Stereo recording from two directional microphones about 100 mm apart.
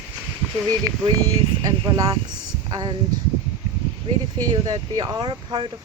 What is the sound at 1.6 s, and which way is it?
Speech, 40° right (ahead or behind).